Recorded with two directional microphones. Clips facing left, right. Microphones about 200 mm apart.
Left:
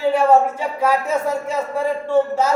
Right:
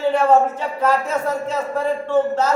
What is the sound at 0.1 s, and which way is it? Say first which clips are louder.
Speech: left 1 dB; 10° left (ahead or behind).